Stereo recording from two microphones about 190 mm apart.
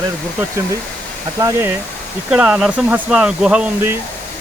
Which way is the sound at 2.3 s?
5° right (ahead or behind).